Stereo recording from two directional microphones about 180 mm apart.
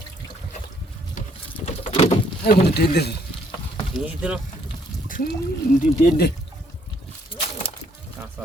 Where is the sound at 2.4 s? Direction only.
65° left (ahead or behind).